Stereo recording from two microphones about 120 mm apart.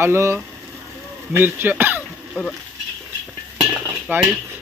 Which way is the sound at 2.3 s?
5° left (ahead or behind).